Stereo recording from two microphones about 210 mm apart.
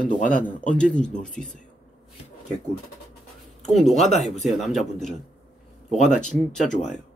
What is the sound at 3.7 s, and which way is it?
Speech, centre (ahead or behind).